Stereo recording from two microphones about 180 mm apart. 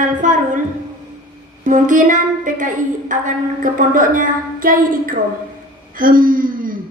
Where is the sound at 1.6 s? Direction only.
45° right (ahead or behind).